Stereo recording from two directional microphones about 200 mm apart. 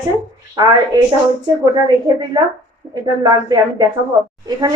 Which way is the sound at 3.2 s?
20° right (ahead or behind).